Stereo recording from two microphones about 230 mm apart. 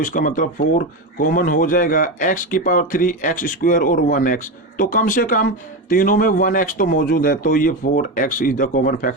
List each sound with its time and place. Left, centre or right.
0.0 s speech: left